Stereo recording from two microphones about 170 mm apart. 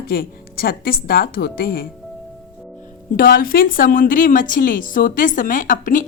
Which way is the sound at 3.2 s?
60° left (ahead or behind).